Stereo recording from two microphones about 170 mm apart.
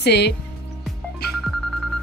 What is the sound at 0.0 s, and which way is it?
Speech, 75° left (ahead or behind).